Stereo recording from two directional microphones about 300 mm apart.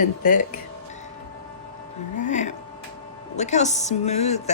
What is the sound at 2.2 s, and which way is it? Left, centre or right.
Music, left.